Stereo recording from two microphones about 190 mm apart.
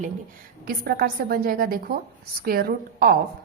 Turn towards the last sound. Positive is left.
turn(degrees=-55)  # may be behind; listen again after turning